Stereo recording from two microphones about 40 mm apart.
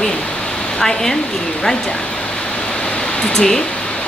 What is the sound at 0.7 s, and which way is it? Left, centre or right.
Speech, centre.